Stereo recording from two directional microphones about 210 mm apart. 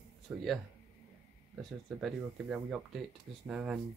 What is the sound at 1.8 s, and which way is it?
Speech, centre (ahead or behind).